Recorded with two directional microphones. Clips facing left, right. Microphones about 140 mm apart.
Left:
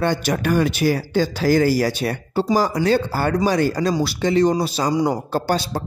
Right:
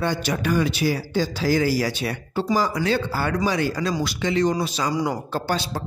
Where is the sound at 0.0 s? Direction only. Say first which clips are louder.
Left 4 dB; 50° left (ahead or behind).